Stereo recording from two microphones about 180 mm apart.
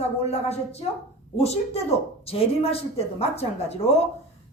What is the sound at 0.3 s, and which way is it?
Speech, 35° left (ahead or behind).